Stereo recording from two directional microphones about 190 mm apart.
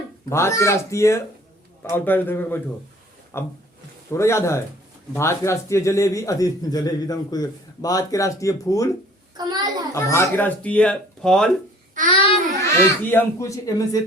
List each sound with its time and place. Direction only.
0.3 s speech: 15° left (ahead or behind)
9.4 s a child's voice: 20° right (ahead or behind)
9.9 s speech: 15° left (ahead or behind)
12.0 s a child's voice: 25° left (ahead or behind)
13.1 s speech: 15° left (ahead or behind)